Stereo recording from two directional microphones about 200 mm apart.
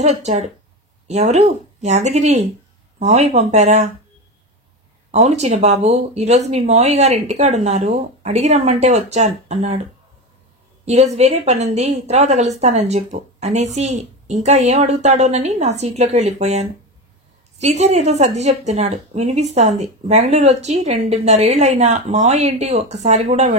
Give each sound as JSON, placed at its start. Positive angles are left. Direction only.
{"t": 0.0, "sound": "a woman's voice", "side_deg": -35}
{"t": 5.1, "sound": "a woman's voice", "side_deg": -35}
{"t": 10.9, "sound": "a woman's voice", "side_deg": -35}